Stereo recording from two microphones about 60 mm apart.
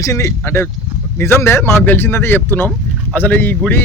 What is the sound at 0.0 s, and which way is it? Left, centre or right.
Speech, left.